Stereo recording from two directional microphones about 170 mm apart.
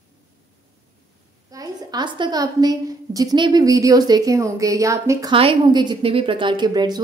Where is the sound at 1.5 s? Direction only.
20° right (ahead or behind).